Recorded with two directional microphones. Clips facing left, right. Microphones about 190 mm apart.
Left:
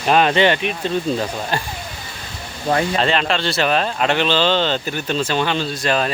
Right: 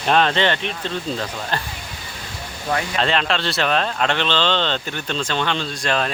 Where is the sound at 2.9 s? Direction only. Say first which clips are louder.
Left 2 dB; centre (ahead or behind).